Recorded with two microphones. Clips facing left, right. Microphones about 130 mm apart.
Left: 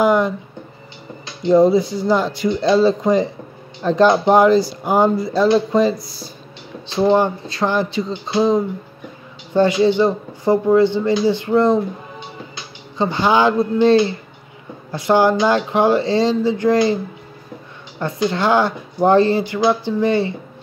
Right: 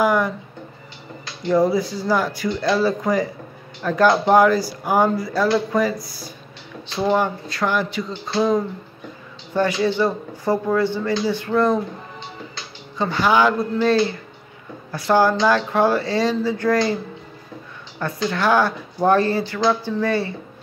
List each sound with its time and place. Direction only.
0.0 s a sound: 20° left (ahead or behind)
1.2 s speech: 20° left (ahead or behind)
12.9 s speech: 25° left (ahead or behind)
17.9 s speech: 25° left (ahead or behind)